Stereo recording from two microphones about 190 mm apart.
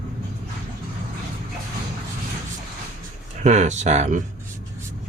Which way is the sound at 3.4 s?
35° right (ahead or behind).